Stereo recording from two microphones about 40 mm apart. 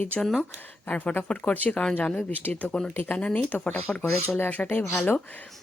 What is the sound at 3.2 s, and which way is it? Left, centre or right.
Speech, left.